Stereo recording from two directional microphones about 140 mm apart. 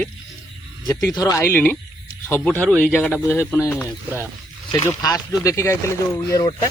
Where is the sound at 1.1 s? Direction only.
25° left (ahead or behind).